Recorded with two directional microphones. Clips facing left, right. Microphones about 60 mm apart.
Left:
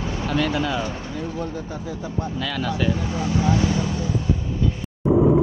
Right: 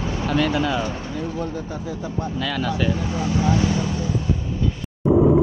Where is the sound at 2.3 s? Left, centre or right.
Right.